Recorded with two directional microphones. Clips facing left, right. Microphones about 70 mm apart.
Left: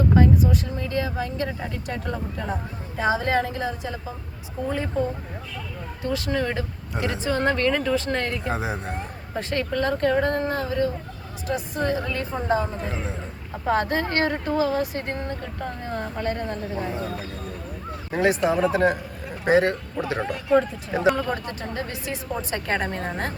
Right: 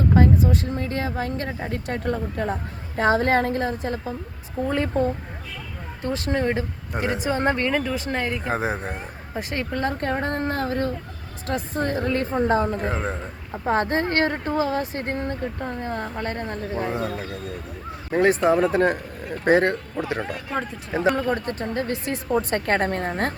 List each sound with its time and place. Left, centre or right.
0.2 s a woman's voice: right
6.0 s speech: right
7.7 s speech: centre
8.4 s speech: right
9.0 s speech: centre
9.7 s speech: right
13.7 s speech: right
18.1 s a woman's voice: right
20.9 s speech: centre
21.4 s a woman's voice: right